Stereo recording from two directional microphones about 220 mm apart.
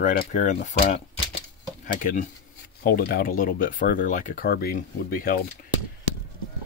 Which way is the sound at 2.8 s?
40° left (ahead or behind).